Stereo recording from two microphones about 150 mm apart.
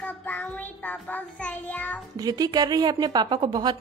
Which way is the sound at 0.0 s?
10° left (ahead or behind).